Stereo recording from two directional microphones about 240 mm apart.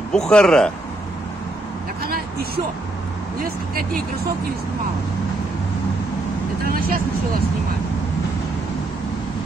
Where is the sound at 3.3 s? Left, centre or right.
Right.